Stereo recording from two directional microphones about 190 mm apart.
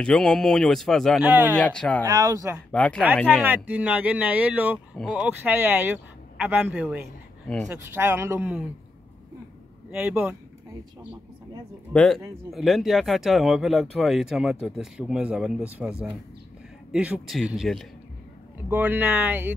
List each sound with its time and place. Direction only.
0.0 s speech: 5° left (ahead or behind)
1.6 s speech: 5° left (ahead or behind)
2.0 s speech: 20° right (ahead or behind)
2.7 s speech: 5° left (ahead or behind)
3.4 s speech: 10° right (ahead or behind)
9.8 s speech: 5° right (ahead or behind)
11.9 s speech: 5° left (ahead or behind)